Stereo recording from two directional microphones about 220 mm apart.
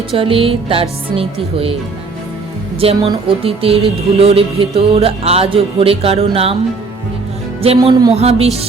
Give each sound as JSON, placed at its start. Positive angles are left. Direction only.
{"t": 0.2, "sound": "music", "side_deg": -25}
{"t": 2.8, "sound": "music", "side_deg": -25}
{"t": 7.6, "sound": "music", "side_deg": -25}